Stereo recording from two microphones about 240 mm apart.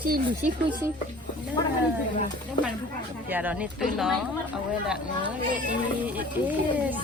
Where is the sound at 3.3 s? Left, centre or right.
Centre.